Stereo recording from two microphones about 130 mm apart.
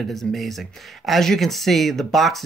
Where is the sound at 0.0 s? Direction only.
Centre (ahead or behind).